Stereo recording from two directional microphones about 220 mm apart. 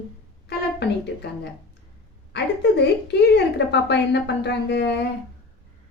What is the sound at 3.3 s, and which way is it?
A woman's voice, 50° left (ahead or behind).